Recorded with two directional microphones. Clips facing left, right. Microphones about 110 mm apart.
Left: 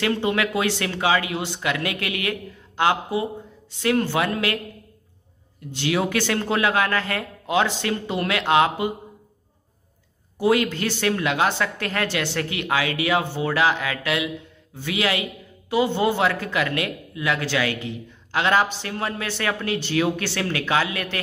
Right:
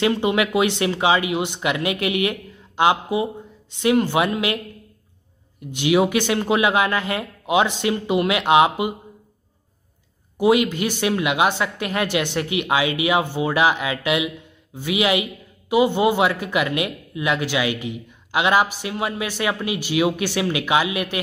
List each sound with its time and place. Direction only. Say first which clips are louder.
0.0 s speech: right 3 dB; 15° right (ahead or behind)
5.7 s speech: right 5 dB; 15° right (ahead or behind)
10.3 s speech: right 3 dB; 15° right (ahead or behind)